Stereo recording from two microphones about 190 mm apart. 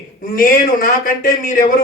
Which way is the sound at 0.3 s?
50° left (ahead or behind).